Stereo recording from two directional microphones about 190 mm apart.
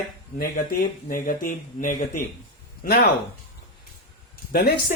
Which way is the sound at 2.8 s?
55° left (ahead or behind).